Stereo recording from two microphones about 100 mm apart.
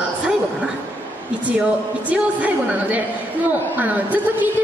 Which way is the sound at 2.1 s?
15° right (ahead or behind).